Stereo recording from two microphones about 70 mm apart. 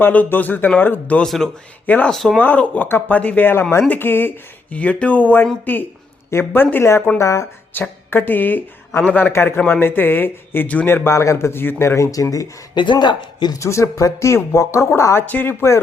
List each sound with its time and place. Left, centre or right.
0.0 s speech: left
1.2 s speech: centre
2.4 s speech: left
7.2 s speech: left
7.7 s speech: left
9.3 s speech: left
11.1 s speech: left
12.1 s speech: left
12.7 s speech: left
13.6 s speech: left
15.3 s speech: left